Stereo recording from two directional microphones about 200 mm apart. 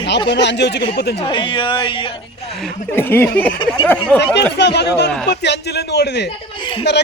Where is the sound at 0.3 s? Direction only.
60° left (ahead or behind).